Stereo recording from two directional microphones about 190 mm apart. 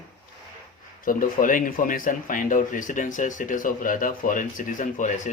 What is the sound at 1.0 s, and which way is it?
Speech, 45° left (ahead or behind).